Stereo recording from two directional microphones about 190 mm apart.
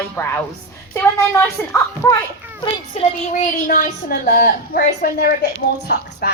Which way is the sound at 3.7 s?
50° left (ahead or behind).